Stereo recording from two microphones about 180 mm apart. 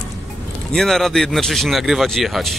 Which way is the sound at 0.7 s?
Centre (ahead or behind).